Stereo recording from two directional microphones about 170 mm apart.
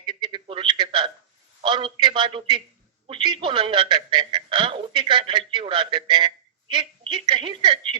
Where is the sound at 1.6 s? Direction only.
30° right (ahead or behind).